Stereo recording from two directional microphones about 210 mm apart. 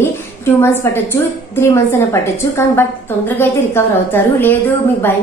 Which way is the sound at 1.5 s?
10° left (ahead or behind).